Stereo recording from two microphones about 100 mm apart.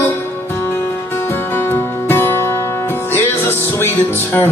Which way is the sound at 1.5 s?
25° left (ahead or behind).